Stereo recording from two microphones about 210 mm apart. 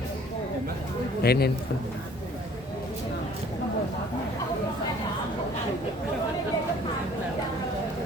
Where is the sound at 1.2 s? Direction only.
50° left (ahead or behind).